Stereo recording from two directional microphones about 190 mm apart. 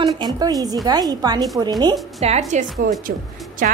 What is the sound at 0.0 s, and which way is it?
A woman's voice, 20° right (ahead or behind).